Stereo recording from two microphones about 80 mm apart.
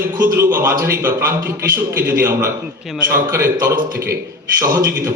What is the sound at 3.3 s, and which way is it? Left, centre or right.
Speech, right.